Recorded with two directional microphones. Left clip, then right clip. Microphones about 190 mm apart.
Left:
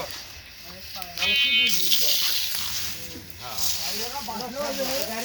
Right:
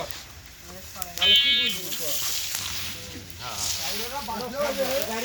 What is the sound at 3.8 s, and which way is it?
Speech, 40° left (ahead or behind).